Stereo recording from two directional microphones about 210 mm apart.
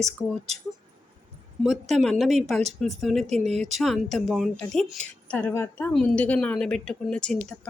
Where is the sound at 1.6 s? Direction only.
Centre (ahead or behind).